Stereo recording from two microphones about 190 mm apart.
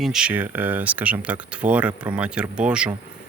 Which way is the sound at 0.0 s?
5° right (ahead or behind).